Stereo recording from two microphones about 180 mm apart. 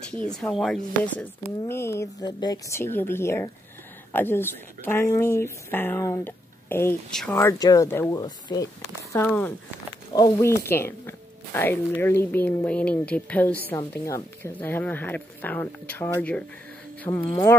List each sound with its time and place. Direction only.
0.3 s speech: 5° left (ahead or behind); by 8.6 s 20° left (ahead or behind)
9.1 s speech: 10° left (ahead or behind)
17.3 s speech: 20° left (ahead or behind)